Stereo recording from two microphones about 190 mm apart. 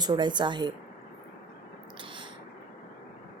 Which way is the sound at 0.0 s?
25° right (ahead or behind).